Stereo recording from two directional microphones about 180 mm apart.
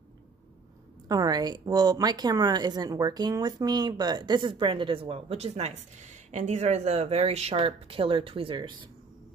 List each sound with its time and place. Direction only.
1.0 s a woman's voice: 20° right (ahead or behind)